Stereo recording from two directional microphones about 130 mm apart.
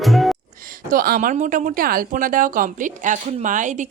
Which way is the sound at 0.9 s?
90° right.